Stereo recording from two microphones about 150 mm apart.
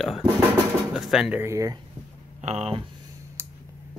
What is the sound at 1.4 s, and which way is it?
Speech, 20° right (ahead or behind).